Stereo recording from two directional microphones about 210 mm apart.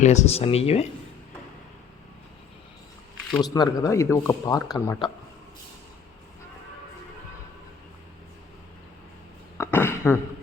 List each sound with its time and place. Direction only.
0.0 s speech: 30° left (ahead or behind)
3.4 s a man's voice: 20° left (ahead or behind)
9.6 s a sound: 10° left (ahead or behind)